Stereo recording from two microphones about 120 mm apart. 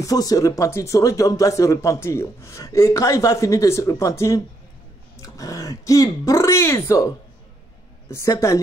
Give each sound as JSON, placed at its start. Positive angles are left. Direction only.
{"t": 0.0, "sound": "speech", "side_deg": 30}
{"t": 8.1, "sound": "speech", "side_deg": 25}